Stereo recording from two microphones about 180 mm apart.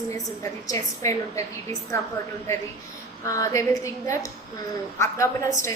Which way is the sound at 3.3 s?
20° left (ahead or behind).